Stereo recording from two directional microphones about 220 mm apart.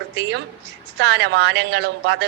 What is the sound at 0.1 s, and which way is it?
A man's voice, 50° right (ahead or behind).